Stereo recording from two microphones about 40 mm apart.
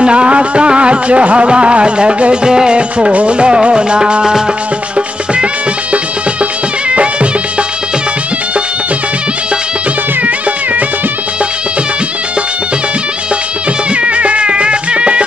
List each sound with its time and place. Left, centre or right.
0.0 s music: right
6.9 s music: right
14.0 s music: right